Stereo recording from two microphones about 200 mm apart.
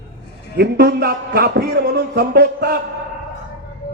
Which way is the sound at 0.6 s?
50° right (ahead or behind).